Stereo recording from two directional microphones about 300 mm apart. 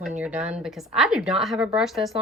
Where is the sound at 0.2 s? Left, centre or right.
Centre.